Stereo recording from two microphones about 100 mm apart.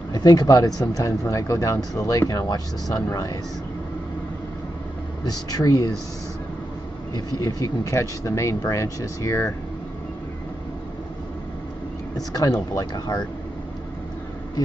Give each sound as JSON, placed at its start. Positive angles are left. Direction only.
{"t": 0.1, "sound": "speech", "side_deg": 40}
{"t": 5.2, "sound": "speech", "side_deg": 40}
{"t": 7.2, "sound": "speech", "side_deg": 40}
{"t": 12.3, "sound": "speech", "side_deg": 35}